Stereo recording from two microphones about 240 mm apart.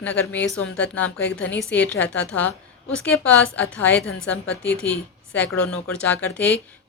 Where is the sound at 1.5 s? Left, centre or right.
Centre.